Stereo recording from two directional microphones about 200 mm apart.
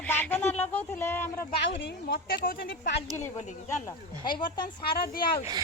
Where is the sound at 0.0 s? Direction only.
10° left (ahead or behind).